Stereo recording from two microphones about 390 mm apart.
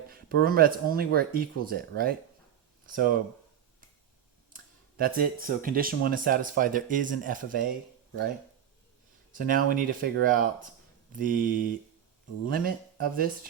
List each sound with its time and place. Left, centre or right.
0.1 s speech: right
4.5 s speech: right
9.3 s speech: right